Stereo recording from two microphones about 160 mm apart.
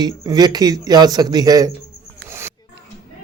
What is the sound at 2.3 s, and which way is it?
Pig, 15° right (ahead or behind).